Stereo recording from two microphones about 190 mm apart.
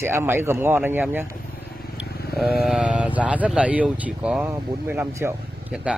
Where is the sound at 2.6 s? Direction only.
5° right (ahead or behind).